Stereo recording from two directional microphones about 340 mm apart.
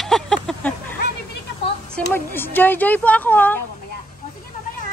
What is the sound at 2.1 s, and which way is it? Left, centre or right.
A woman's voice, centre.